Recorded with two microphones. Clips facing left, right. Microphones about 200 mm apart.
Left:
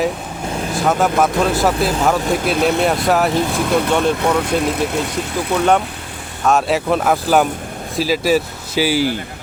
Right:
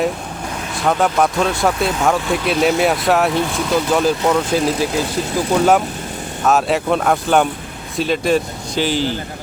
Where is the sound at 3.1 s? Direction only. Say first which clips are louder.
Even; centre (ahead or behind).